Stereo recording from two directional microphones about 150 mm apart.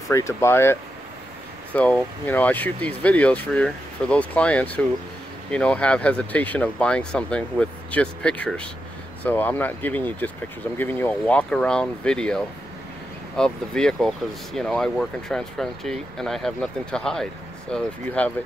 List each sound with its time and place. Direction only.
0.1 s speech: 20° left (ahead or behind)